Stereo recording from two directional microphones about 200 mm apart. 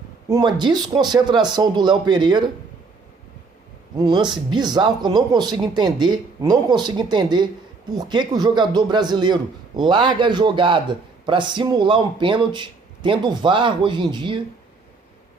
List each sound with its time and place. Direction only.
0.3 s a man's voice: 20° right (ahead or behind)
3.9 s a man's voice: 20° right (ahead or behind)